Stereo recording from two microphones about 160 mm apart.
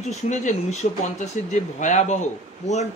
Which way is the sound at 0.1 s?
45° left (ahead or behind).